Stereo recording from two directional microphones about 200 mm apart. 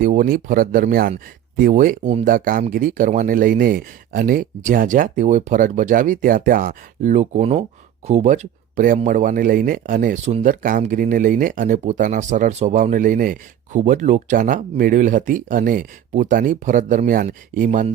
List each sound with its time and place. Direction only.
0.0 s speech: 45° right (ahead or behind)